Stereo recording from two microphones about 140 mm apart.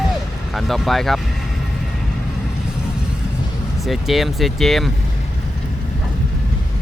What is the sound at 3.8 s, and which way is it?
Speech, centre (ahead or behind).